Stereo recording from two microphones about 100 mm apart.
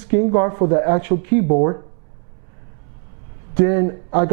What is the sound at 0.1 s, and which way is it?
Speech, 15° right (ahead or behind).